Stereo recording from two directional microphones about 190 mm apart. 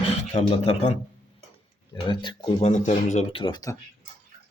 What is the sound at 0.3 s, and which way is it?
A man's voice, 30° left (ahead or behind).